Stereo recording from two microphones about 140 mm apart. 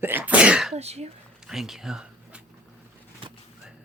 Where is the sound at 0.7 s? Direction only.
50° right (ahead or behind).